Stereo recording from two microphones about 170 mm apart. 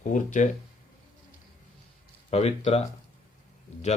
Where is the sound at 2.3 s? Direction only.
40° left (ahead or behind).